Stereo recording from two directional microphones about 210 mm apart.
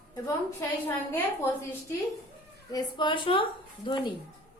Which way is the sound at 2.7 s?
20° left (ahead or behind).